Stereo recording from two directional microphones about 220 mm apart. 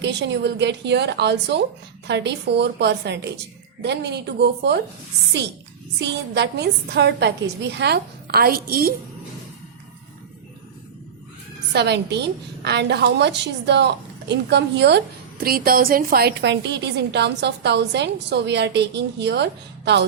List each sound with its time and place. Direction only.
0.0 s a woman's voice: 50° right (ahead or behind)
6.0 s a woman's voice: 50° right (ahead or behind)
11.7 s a woman's voice: 50° right (ahead or behind)